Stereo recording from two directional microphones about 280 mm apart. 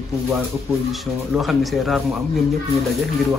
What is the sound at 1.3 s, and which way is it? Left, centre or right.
Speech, centre.